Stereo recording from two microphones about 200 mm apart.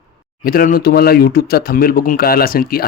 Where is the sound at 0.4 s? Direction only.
45° left (ahead or behind).